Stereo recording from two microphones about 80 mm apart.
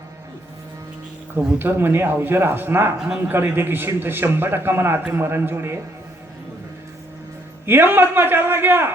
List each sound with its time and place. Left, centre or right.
1.5 s a man's voice: right
7.6 s a man's voice: right